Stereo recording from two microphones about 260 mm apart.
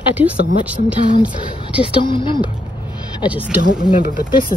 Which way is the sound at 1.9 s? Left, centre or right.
Centre.